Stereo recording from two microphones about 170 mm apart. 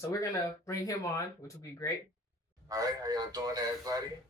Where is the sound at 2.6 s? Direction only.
20° right (ahead or behind).